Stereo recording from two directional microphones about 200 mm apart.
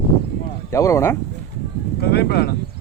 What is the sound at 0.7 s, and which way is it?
Speech, 15° left (ahead or behind).